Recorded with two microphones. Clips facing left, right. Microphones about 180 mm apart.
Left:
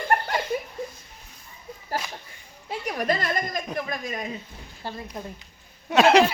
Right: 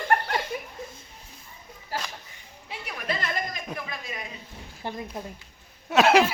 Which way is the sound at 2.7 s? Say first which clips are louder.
Left 7 dB; 40° left (ahead or behind).